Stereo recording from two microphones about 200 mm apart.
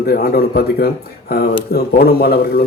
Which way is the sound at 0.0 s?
50° left (ahead or behind).